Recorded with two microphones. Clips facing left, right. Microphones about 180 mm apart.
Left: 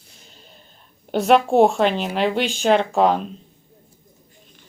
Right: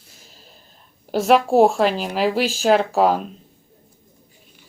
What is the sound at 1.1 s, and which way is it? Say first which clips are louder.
Speech: even; centre (ahead or behind).